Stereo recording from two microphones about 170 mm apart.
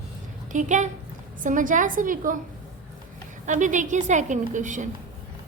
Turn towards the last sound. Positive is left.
turn(degrees=-45)  # may be behind; listen again after turning